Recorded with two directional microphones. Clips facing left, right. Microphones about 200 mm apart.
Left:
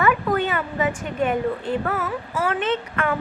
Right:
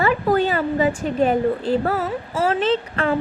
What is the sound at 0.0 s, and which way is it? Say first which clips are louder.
A woman's voice: right 3 dB; 30° right (ahead or behind).